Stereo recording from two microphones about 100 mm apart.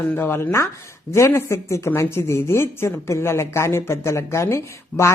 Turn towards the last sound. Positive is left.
turn(degrees=25)  # may be behind; listen again after turning